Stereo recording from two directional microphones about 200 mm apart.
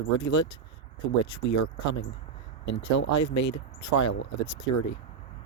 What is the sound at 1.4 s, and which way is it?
Speech, 70° left (ahead or behind).